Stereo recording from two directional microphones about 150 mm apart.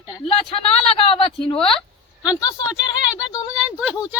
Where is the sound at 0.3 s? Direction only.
40° left (ahead or behind).